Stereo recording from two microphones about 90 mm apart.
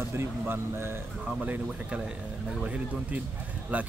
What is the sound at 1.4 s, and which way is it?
Speech, 15° right (ahead or behind).